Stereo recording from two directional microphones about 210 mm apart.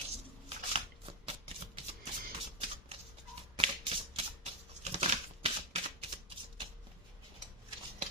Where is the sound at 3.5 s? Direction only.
25° right (ahead or behind).